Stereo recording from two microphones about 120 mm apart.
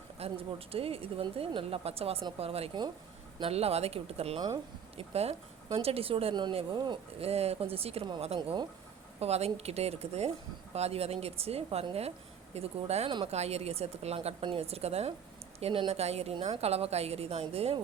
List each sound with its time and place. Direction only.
0.2 s speech: 50° right (ahead or behind)
4.4 s speech: 35° right (ahead or behind)
4.9 s speech: 60° right (ahead or behind)
6.7 s speech: 40° right (ahead or behind)
7.2 s speech: 60° right (ahead or behind)
8.4 s speech: 40° right (ahead or behind)
9.2 s speech: 60° right (ahead or behind)